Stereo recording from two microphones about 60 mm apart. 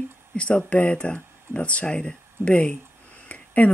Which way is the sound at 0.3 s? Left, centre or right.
Centre.